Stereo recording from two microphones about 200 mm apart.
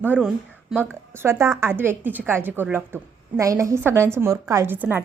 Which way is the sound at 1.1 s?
10° right (ahead or behind).